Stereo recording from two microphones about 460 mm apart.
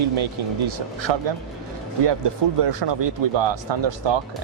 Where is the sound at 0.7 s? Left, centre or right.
Right.